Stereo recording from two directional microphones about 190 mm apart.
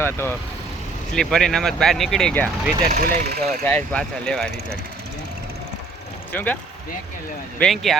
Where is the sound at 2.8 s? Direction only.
50° right (ahead or behind).